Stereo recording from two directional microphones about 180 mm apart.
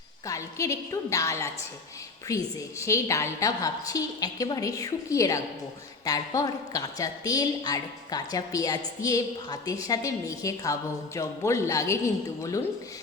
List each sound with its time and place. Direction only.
0.3 s a woman's voice: 15° left (ahead or behind)